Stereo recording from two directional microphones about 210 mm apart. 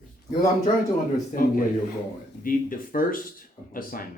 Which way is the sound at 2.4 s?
40° left (ahead or behind).